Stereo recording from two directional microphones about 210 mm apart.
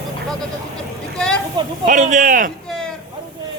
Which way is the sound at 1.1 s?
5° left (ahead or behind).